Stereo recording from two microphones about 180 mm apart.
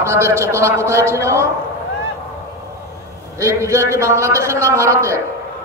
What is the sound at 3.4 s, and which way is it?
A man's voice, 15° right (ahead or behind).